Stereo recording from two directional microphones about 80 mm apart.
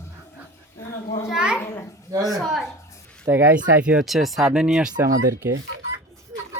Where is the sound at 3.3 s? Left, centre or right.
Right.